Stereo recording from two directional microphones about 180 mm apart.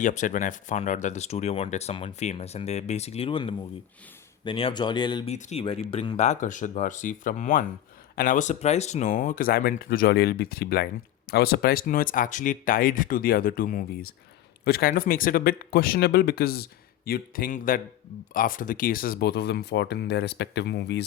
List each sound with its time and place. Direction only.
0.0 s speech: 45° left (ahead or behind); by 5.3 s 25° left (ahead or behind)
5.3 s speech: 40° left (ahead or behind); by 21.0 s 70° left (ahead or behind)